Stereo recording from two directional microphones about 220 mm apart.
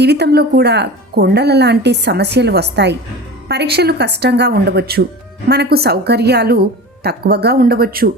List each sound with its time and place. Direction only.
0.0 s a woman's voice: 50° right (ahead or behind)